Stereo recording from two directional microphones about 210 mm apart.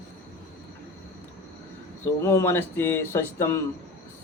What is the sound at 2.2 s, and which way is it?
Speech, 15° left (ahead or behind).